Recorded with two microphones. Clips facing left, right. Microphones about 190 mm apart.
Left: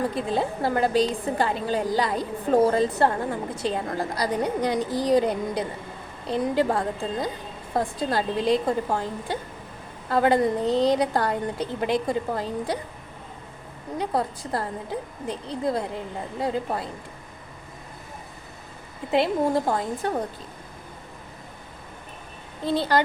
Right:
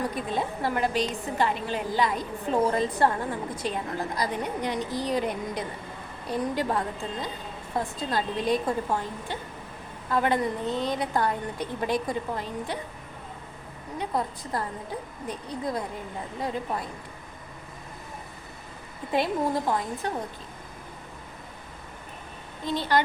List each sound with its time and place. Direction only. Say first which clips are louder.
0.0 s a woman's voice: left 4 dB; 25° left (ahead or behind)
12.3 s a woman's voice: left 5 dB; 35° left (ahead or behind)
14.0 s a woman's voice: left 3 dB; 35° left (ahead or behind)
19.1 s a woman's voice: left 4 dB; 25° left (ahead or behind)
22.6 s a woman's voice: left 4 dB; 35° left (ahead or behind)